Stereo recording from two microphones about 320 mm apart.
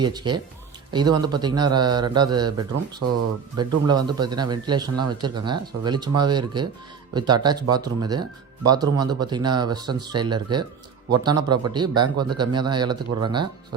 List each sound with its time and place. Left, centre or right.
0.0 s speech: centre
3.0 s speech: right
3.8 s speech: centre